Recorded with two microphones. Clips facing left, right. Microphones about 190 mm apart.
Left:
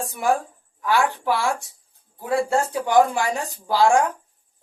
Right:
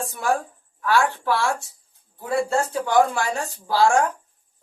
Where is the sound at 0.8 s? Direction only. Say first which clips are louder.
Even; 15° left (ahead or behind).